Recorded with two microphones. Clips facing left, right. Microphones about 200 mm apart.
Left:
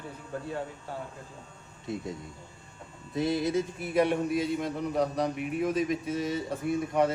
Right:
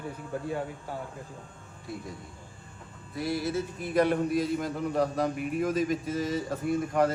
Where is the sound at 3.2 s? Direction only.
20° left (ahead or behind).